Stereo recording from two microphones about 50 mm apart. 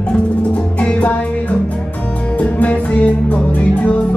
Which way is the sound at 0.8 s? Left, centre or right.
Left.